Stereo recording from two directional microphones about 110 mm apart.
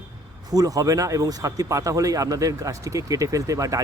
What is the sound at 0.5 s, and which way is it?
Speech, 35° right (ahead or behind).